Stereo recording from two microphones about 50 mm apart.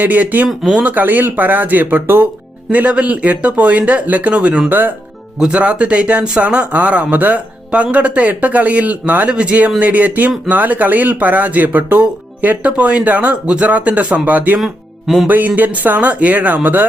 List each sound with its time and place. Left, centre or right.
0.0 s speech: right
2.7 s a man's voice: right
7.7 s a man's voice: right
14.6 s speech: centre
15.3 s speech: right